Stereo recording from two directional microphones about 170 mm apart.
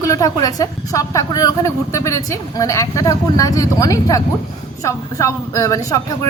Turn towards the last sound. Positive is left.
turn(degrees=20)  # may be behind; listen again after turning